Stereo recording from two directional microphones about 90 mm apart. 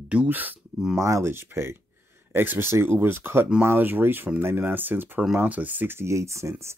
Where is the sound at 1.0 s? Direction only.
35° right (ahead or behind).